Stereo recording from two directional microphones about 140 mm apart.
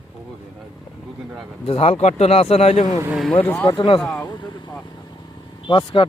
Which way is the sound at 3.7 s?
35° left (ahead or behind).